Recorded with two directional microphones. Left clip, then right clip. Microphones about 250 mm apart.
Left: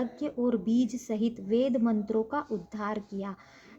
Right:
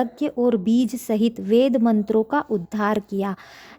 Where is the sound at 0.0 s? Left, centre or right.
Right.